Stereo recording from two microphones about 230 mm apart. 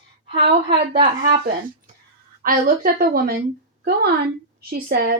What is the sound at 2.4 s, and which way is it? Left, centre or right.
A woman's voice, right.